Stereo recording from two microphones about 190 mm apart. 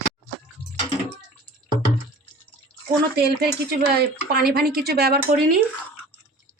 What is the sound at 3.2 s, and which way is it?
Speech, 55° right (ahead or behind).